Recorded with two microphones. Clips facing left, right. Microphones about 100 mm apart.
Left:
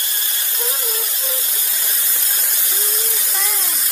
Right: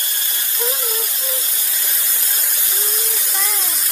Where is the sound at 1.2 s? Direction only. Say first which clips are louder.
Even; 30° left (ahead or behind).